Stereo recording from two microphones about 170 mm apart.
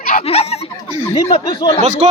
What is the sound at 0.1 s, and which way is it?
Snicker, 40° left (ahead or behind).